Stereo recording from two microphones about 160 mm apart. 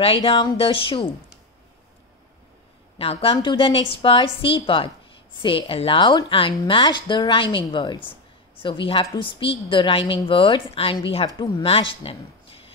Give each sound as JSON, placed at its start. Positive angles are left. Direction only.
{"t": 0.0, "sound": "a woman's voice", "side_deg": 35}
{"t": 3.0, "sound": "a woman's voice", "side_deg": 35}
{"t": 11.2, "sound": "speech", "side_deg": 25}
{"t": 11.6, "sound": "speech", "side_deg": 35}